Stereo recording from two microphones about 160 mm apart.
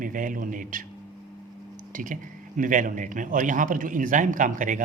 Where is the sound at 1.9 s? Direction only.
55° right (ahead or behind).